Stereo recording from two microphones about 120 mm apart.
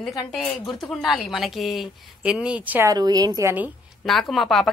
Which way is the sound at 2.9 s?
30° right (ahead or behind).